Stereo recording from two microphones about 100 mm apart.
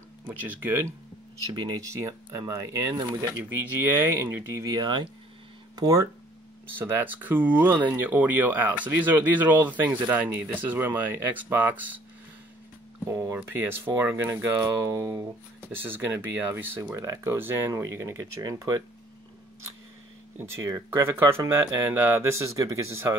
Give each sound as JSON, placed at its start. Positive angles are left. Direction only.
{"t": 0.3, "sound": "speech", "side_deg": -20}
{"t": 1.5, "sound": "speech", "side_deg": -35}
{"t": 4.6, "sound": "speech", "side_deg": -45}
{"t": 5.8, "sound": "speech", "side_deg": -35}
{"t": 6.8, "sound": "speech", "side_deg": -20}
{"t": 13.1, "sound": "speech", "side_deg": -35}
{"t": 13.7, "sound": "speech", "side_deg": -20}
{"t": 15.7, "sound": "speech", "side_deg": -20}
{"t": 20.3, "sound": "speech", "side_deg": -25}